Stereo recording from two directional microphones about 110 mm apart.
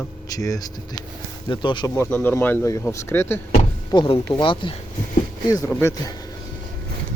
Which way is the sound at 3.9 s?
50° left (ahead or behind).